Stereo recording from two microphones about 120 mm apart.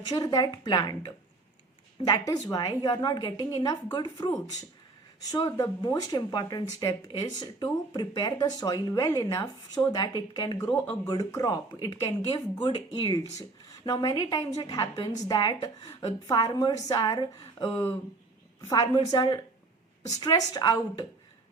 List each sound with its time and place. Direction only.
0.0 s speech: 35° left (ahead or behind)